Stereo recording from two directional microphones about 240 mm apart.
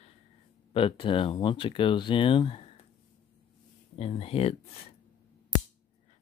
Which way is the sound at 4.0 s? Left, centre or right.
Left.